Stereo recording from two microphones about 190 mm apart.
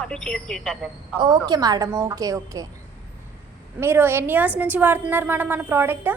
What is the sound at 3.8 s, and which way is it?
A woman's voice, 10° right (ahead or behind).